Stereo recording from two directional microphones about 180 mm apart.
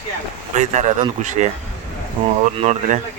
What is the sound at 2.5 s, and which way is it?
Speech, 35° right (ahead or behind).